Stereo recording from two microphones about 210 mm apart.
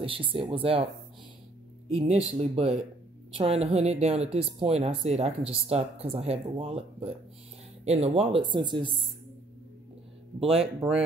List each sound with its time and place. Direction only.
0.0 s speech: 25° right (ahead or behind)
1.9 s speech: 25° right (ahead or behind)
10.4 s speech: 30° right (ahead or behind)